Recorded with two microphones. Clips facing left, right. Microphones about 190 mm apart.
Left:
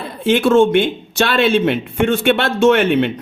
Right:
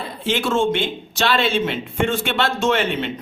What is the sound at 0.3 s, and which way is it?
Speech, 55° left (ahead or behind).